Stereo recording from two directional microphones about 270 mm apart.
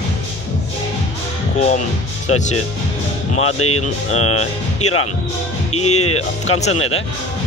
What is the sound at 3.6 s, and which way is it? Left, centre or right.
Speech, left.